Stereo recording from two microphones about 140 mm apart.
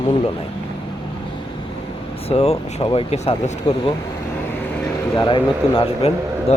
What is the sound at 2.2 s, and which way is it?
A man's voice, 50° left (ahead or behind).